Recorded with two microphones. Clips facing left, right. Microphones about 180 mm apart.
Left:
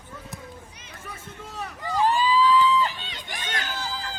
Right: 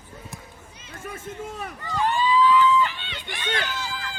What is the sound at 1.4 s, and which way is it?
Run, 50° right (ahead or behind).